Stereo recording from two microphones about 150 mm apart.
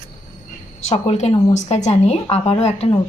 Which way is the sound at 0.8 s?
45° left (ahead or behind).